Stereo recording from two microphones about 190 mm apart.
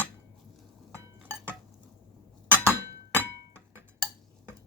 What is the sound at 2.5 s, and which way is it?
Chink, 10° right (ahead or behind).